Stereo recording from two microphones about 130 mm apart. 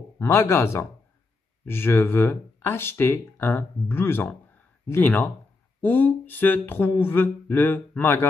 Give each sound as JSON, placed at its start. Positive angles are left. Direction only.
{"t": 0.2, "sound": "speech", "side_deg": 20}